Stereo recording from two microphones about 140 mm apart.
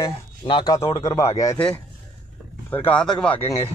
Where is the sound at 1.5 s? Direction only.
10° left (ahead or behind).